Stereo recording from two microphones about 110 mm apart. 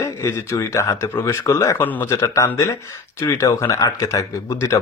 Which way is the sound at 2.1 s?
30° left (ahead or behind).